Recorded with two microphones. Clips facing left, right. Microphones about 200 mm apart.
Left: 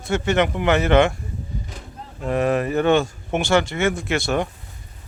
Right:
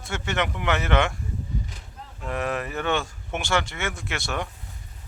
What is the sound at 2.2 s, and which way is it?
Speech, 35° left (ahead or behind).